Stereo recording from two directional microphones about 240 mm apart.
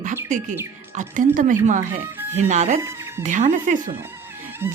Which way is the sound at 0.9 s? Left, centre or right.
Right.